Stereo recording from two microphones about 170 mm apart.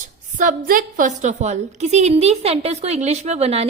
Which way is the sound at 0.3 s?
50° right (ahead or behind).